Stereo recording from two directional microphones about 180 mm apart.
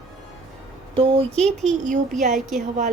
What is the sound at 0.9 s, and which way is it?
Speech, 30° right (ahead or behind).